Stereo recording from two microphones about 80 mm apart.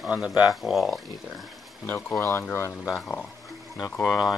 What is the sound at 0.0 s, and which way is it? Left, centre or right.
Speech, centre.